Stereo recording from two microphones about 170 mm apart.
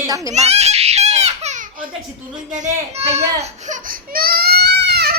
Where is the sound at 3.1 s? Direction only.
40° right (ahead or behind).